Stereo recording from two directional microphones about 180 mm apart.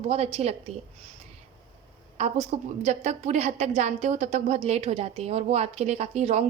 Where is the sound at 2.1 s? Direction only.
35° right (ahead or behind).